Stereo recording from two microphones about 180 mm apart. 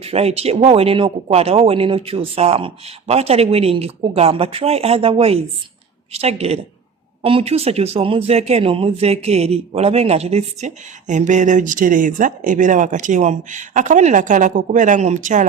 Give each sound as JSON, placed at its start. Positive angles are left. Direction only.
{"t": 0.0, "sound": "a man's voice", "side_deg": -35}